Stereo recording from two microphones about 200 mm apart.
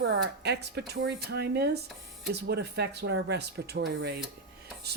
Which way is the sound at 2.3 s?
55° right (ahead or behind).